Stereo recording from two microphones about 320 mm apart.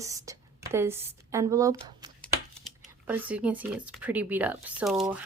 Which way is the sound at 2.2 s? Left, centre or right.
Centre.